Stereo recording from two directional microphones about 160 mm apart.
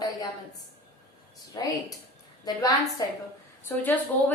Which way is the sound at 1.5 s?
25° left (ahead or behind).